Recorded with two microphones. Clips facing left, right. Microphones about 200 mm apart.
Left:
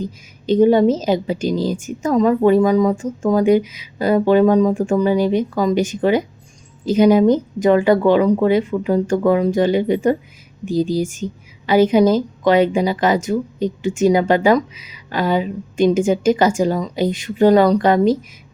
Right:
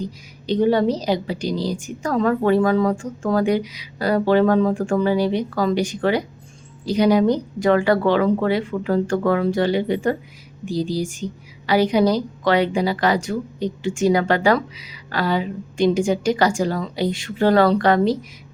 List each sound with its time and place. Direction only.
0.4 s a woman's voice: 20° left (ahead or behind)